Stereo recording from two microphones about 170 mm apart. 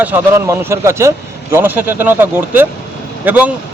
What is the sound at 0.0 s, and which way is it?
Speech, 15° right (ahead or behind).